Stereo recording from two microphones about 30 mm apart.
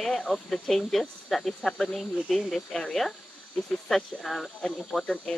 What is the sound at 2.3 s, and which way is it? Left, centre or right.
Speech, centre.